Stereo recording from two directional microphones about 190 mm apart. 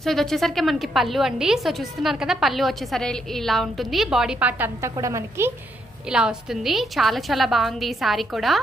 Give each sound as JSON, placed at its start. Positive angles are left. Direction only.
{"t": 0.0, "sound": "a woman's voice", "side_deg": 0}
{"t": 6.0, "sound": "a woman's voice", "side_deg": -5}